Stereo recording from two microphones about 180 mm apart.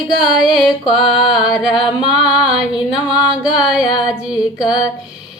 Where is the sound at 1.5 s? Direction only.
5° right (ahead or behind).